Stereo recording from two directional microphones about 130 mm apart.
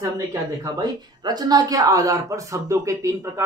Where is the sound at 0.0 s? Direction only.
30° right (ahead or behind).